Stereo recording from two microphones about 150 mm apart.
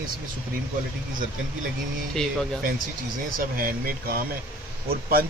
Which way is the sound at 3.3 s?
70° right (ahead or behind).